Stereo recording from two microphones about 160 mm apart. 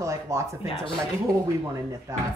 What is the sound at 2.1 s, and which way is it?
Speech, 20° right (ahead or behind).